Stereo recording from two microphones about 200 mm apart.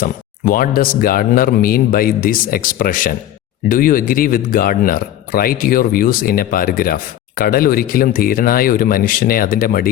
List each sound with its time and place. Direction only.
0.0 s speech: 45° left (ahead or behind)